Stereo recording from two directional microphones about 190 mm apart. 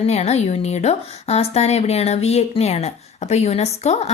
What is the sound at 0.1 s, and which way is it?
A woman's voice, 35° left (ahead or behind).